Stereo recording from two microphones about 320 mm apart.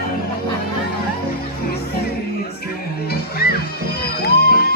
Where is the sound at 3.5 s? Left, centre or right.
Left.